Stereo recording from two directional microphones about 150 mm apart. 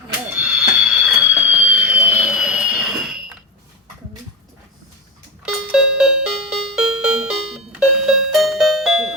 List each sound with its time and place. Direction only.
0.3 s music: 5° right (ahead or behind)
5.5 s doorbell: 5° right (ahead or behind)